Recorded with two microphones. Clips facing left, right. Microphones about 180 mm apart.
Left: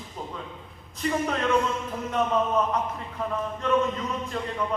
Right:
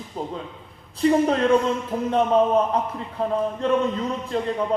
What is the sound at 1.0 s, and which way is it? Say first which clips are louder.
A man's voice: right 8 dB; 30° right (ahead or behind).